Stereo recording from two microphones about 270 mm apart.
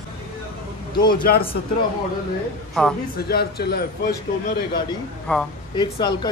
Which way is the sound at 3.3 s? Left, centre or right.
Left.